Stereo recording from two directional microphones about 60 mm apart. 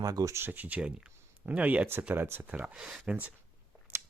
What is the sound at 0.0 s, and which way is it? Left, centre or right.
Speech, right.